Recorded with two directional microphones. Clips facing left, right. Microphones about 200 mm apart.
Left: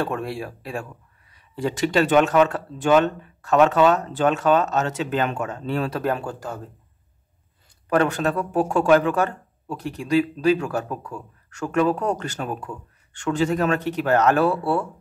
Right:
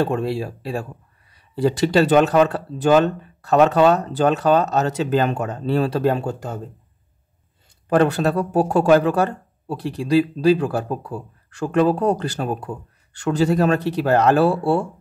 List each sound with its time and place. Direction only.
0.0 s speech: 30° right (ahead or behind)
7.9 s speech: 35° right (ahead or behind)